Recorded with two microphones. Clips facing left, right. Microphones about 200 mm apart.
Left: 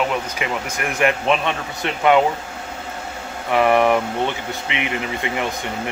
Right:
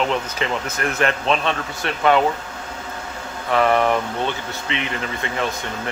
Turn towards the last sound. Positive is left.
turn(degrees=15)  # may be behind; listen again after turning